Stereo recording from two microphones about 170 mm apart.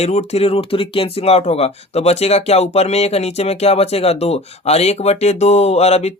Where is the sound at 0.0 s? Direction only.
40° left (ahead or behind).